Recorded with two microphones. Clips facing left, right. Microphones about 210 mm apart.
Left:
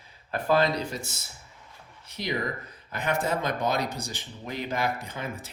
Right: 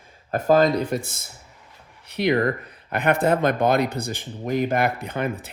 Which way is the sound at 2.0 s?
65° right (ahead or behind).